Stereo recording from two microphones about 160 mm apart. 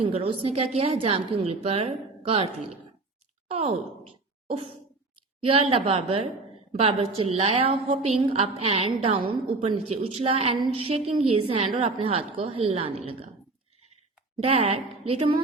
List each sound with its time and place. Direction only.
0.0 s a woman's voice: 35° right (ahead or behind)
3.5 s a woman's voice: 40° right (ahead or behind)
4.4 s a sound: 35° right (ahead or behind)
5.4 s a woman's voice: 35° right (ahead or behind)
14.3 s a woman's voice: 40° right (ahead or behind)